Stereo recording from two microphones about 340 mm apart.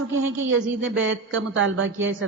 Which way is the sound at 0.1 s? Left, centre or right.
Right.